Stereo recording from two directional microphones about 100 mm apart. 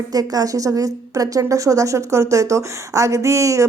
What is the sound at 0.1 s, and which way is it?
A woman's voice, 40° right (ahead or behind).